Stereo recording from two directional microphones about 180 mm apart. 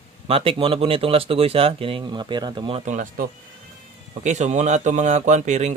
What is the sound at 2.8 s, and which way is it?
Speech, 45° right (ahead or behind).